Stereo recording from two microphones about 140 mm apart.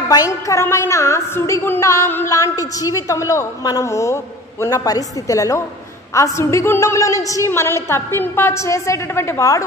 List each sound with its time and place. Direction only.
0.1 s a woman's voice: 25° left (ahead or behind)